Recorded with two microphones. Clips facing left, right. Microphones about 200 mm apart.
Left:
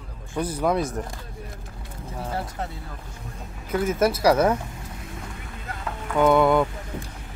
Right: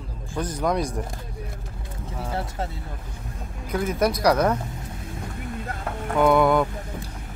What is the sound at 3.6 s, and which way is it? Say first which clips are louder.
Speech: left 1 dB; 5° left (ahead or behind).